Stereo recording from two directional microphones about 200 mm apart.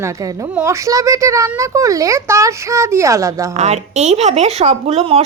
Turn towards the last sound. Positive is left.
turn(degrees=-30)  # may be behind; listen again after turning